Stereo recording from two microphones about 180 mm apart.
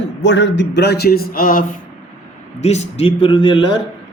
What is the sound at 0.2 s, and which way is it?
Speech, 80° left.